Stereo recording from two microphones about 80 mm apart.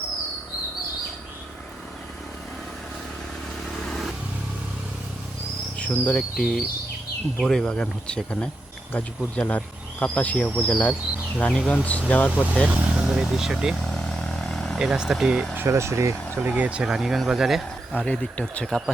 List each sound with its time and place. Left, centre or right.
3.8 s vehicle: centre
5.8 s insect: centre
6.3 s speech: centre
12.3 s speech: centre
13.9 s vehicle: centre
14.8 s speech: centre
15.5 s speech: right
16.5 s speech: centre
17.9 s speech: centre